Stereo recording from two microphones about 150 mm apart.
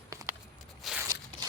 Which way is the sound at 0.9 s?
Centre (ahead or behind).